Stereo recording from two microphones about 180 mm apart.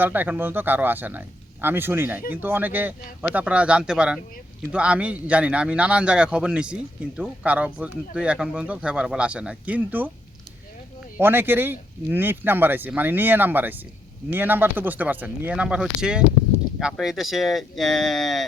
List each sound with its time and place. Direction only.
0.0 s a man's voice: 10° right (ahead or behind)
11.2 s a man's voice: 10° right (ahead or behind)